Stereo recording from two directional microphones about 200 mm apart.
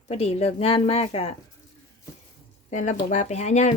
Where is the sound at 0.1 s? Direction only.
30° left (ahead or behind).